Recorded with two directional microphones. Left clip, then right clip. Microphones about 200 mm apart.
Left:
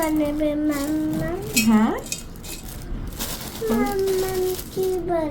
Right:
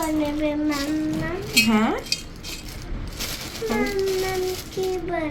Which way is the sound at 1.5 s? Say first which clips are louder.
Right 1 dB; 20° left (ahead or behind).